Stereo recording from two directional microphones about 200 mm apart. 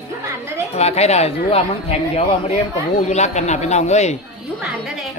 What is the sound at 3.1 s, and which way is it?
Speech, 35° left (ahead or behind).